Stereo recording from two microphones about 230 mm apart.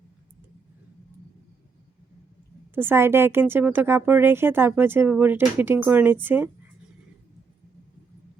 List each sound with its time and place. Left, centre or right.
2.7 s speech: centre